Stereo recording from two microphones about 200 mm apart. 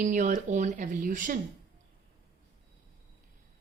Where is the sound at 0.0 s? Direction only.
40° right (ahead or behind).